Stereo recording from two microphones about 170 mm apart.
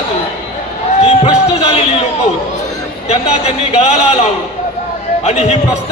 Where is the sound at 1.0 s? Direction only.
35° left (ahead or behind).